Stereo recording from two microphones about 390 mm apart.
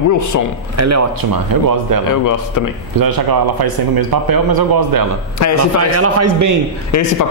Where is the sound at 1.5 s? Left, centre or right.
Right.